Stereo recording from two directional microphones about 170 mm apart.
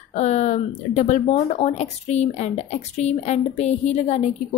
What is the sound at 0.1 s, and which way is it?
A woman's voice, 40° left (ahead or behind).